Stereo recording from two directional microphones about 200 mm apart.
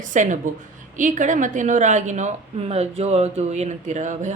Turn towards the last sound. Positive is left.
turn(degrees=-35)  # may be behind; listen again after turning